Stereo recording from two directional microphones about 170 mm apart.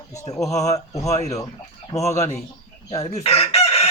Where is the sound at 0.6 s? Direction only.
20° left (ahead or behind).